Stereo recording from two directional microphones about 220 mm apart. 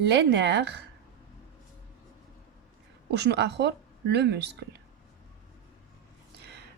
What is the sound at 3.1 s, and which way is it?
Speech, 50° right (ahead or behind).